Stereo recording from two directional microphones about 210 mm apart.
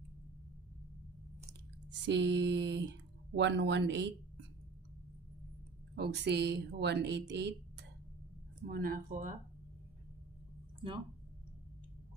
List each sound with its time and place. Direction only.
1.9 s speech: 55° right (ahead or behind)
5.9 s speech: 50° right (ahead or behind)
8.6 s speech: 45° right (ahead or behind)